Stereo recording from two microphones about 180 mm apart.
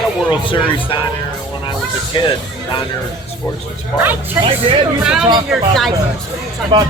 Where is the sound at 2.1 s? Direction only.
25° left (ahead or behind).